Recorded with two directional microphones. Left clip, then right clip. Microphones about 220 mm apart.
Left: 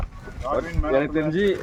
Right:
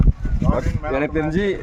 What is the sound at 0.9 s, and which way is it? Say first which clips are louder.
Speech: even; 50° right (ahead or behind).